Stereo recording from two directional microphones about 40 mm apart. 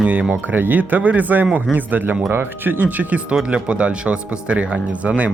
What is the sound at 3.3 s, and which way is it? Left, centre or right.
Speech, right.